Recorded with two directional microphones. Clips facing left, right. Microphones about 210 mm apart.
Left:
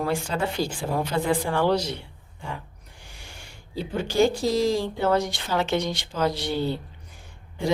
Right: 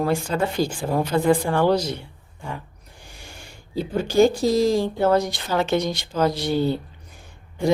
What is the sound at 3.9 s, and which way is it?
Speech, 40° right (ahead or behind).